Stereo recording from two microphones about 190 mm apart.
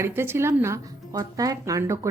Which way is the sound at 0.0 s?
10° right (ahead or behind).